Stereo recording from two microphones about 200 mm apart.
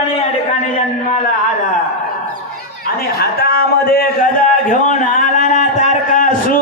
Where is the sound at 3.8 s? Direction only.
45° left (ahead or behind).